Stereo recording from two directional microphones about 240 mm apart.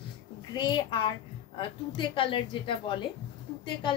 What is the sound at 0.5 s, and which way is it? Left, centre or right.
A woman's voice, centre.